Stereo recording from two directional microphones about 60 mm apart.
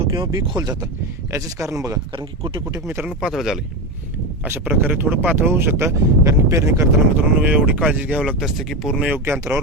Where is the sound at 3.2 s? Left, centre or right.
Centre.